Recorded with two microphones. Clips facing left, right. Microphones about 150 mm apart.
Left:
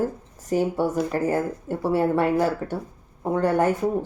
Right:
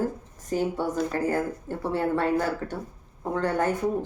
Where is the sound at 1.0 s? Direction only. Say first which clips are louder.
Left 3 dB; 20° left (ahead or behind).